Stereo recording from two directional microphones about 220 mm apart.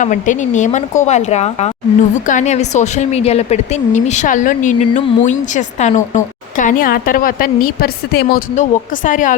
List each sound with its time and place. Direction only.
0.0 s a woman's voice: 35° left (ahead or behind)